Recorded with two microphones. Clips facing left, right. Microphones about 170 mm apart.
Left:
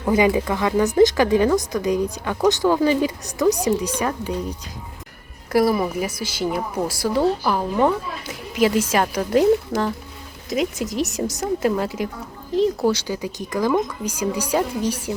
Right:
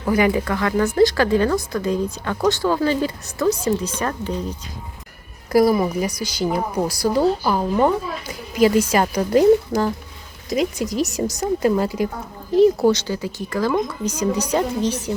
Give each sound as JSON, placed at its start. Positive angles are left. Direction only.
{"t": 0.0, "sound": "a woman's voice", "side_deg": 15}